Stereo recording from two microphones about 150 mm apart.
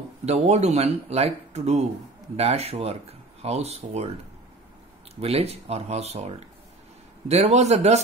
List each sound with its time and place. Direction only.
0.2 s speech: 50° right (ahead or behind)
5.2 s speech: 45° right (ahead or behind)